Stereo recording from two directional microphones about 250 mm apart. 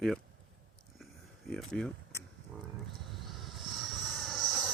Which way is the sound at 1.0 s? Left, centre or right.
Centre.